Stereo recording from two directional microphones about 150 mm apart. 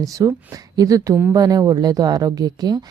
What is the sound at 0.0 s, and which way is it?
Speech, 25° right (ahead or behind).